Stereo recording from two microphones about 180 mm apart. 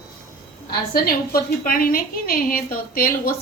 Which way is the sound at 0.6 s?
55° left (ahead or behind).